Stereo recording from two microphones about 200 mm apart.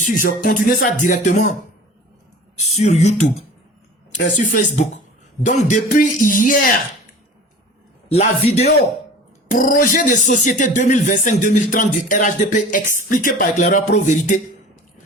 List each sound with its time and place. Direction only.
0.0 s speech: 45° left (ahead or behind)
2.6 s speech: 35° left (ahead or behind)
8.1 s speech: 35° left (ahead or behind)
9.5 s speech: 45° left (ahead or behind)